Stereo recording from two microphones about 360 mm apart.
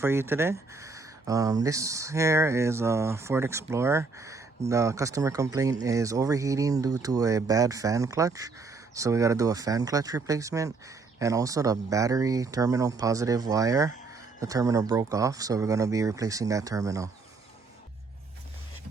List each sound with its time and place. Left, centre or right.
0.0 s speech: centre